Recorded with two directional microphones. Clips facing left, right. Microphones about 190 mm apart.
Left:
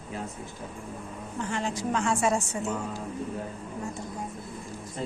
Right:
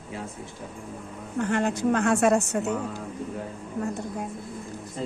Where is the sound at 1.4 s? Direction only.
60° right (ahead or behind).